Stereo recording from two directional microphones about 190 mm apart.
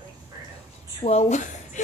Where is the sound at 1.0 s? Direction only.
35° left (ahead or behind).